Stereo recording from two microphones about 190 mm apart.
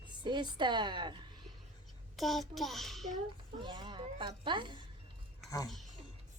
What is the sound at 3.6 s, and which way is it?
Cat, 25° right (ahead or behind).